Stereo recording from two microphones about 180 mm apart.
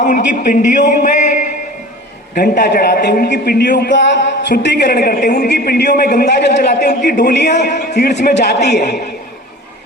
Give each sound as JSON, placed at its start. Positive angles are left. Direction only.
{"t": 0.0, "sound": "a man's voice", "side_deg": 45}
{"t": 0.9, "sound": "a sound", "side_deg": 45}
{"t": 2.3, "sound": "a man's voice", "side_deg": 65}